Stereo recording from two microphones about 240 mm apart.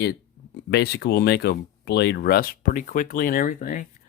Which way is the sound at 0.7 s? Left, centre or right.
Left.